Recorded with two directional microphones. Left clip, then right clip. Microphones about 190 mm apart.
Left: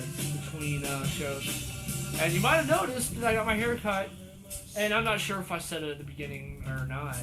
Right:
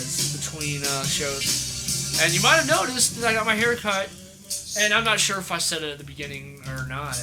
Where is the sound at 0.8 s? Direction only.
30° right (ahead or behind).